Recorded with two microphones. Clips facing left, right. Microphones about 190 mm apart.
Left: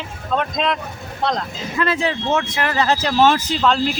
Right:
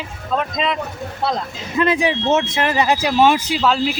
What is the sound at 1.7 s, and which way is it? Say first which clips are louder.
Speech: right 3 dB; 15° right (ahead or behind).